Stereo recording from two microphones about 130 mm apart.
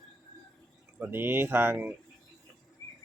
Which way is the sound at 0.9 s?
15° right (ahead or behind).